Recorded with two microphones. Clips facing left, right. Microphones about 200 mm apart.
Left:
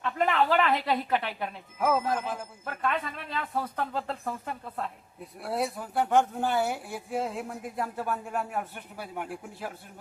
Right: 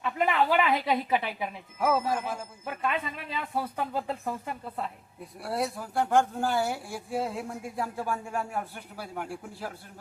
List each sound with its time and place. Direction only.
0.0 s speech: 5° right (ahead or behind)